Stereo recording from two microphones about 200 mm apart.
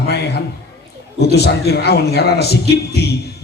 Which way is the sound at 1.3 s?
55° left (ahead or behind).